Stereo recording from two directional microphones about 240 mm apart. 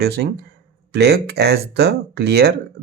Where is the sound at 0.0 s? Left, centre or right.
Right.